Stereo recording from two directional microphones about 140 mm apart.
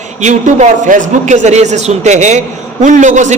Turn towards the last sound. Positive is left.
turn(degrees=-60)  # may be behind; listen again after turning